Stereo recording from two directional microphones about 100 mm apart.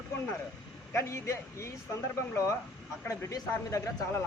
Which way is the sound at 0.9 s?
30° left (ahead or behind).